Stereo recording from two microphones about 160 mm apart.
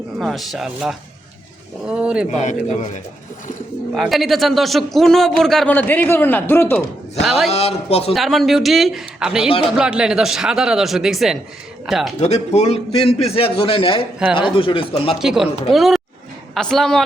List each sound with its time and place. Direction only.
0.2 s a man's voice: centre (ahead or behind)
2.3 s speech: 50° left (ahead or behind)
3.9 s a man's voice: centre (ahead or behind)
7.3 s a man's voice: centre (ahead or behind)
7.5 s a man's voice: 40° left (ahead or behind)
8.1 s a man's voice: centre (ahead or behind)
12.2 s a man's voice: 40° left (ahead or behind)
15.2 s a man's voice: 5° right (ahead or behind)